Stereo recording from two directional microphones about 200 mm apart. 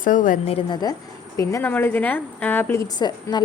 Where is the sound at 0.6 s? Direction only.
25° left (ahead or behind).